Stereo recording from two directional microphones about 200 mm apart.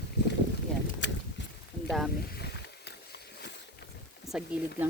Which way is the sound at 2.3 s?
55° left (ahead or behind).